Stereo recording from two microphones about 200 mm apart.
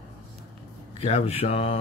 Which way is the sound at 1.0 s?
30° left (ahead or behind).